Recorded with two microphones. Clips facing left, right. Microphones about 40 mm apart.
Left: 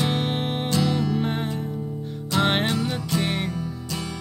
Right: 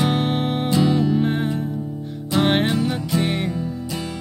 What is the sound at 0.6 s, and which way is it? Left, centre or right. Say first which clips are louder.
Music: right 5 dB; centre.